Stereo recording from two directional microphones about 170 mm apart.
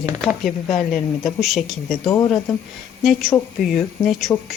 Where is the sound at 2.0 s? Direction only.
20° left (ahead or behind).